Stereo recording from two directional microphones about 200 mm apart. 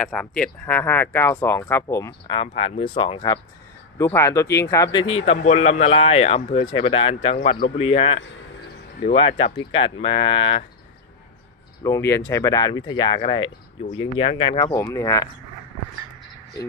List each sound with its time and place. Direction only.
0.0 s speech: 5° left (ahead or behind)
2.3 s speech: 30° left (ahead or behind)
4.0 s speech: 15° left (ahead or behind)
5.0 s speech: 30° left (ahead or behind)
11.8 s speech: 15° left (ahead or behind)